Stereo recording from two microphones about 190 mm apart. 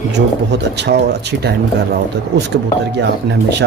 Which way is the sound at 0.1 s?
65° right (ahead or behind).